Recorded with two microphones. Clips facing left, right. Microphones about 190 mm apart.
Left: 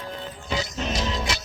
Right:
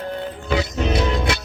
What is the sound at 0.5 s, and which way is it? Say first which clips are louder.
Music: right 7 dB; 60° right (ahead or behind).